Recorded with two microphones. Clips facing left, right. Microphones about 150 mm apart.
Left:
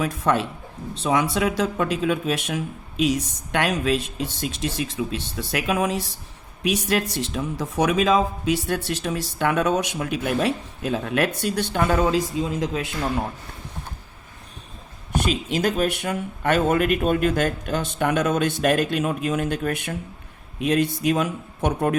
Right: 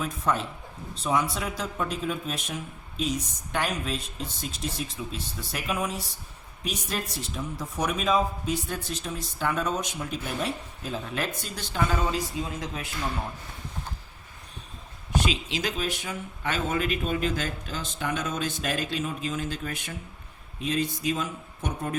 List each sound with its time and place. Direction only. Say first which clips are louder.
0.0 s speech: left 6 dB; 70° left (ahead or behind)
1.0 s speech: left 6 dB; 90° left
6.6 s speech: left 10 dB; 75° left (ahead or behind)
12.7 s speech: left 7 dB; 75° left (ahead or behind)
15.1 s speech: left 5 dB; 50° left (ahead or behind); by 21.9 s 65° left (ahead or behind)